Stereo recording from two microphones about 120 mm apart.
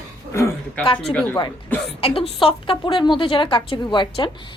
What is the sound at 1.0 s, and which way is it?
Speech, 5° left (ahead or behind).